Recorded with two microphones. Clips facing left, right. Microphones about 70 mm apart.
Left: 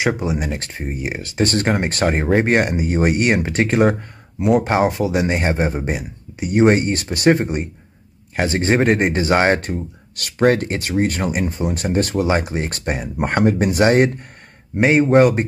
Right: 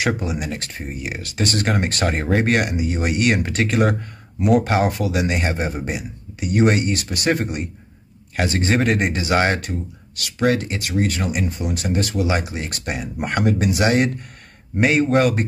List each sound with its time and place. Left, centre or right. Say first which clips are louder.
0.3 s speech: left 3 dB; left